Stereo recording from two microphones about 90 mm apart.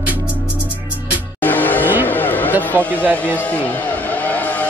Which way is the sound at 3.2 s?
15° left (ahead or behind).